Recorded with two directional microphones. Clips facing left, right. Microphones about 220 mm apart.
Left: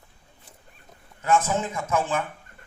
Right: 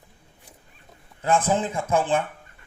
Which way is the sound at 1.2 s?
30° right (ahead or behind).